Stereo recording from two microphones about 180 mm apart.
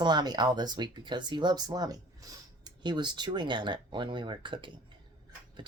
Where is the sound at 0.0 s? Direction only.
25° right (ahead or behind).